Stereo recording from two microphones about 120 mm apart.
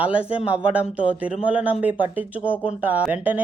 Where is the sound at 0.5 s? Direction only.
10° right (ahead or behind).